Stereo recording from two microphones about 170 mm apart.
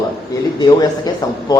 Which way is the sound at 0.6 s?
25° left (ahead or behind).